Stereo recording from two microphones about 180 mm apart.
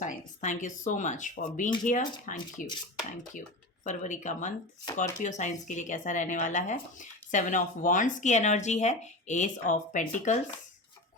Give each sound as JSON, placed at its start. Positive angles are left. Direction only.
{"t": 0.0, "sound": "speech", "side_deg": 45}
{"t": 3.8, "sound": "speech", "side_deg": 45}